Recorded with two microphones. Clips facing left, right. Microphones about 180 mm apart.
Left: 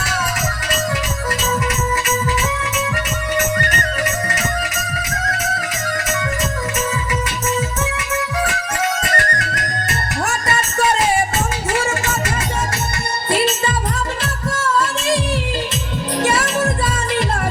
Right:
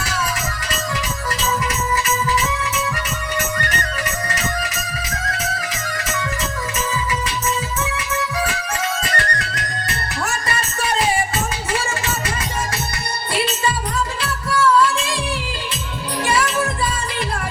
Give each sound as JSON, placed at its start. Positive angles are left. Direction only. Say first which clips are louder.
{"t": 3.6, "sound": "music", "louder": "left 3 dB", "side_deg": 45}
{"t": 5.2, "sound": "music", "louder": "left 3 dB", "side_deg": 45}
{"t": 7.9, "sound": "music", "louder": "left 2 dB", "side_deg": 45}
{"t": 14.5, "sound": "music", "louder": "right 5 dB", "side_deg": 45}
{"t": 16.2, "sound": "music", "louder": "left 1 dB", "side_deg": 45}